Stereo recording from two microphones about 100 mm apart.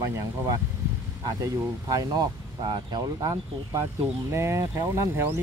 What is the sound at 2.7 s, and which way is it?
Speech, 45° right (ahead or behind).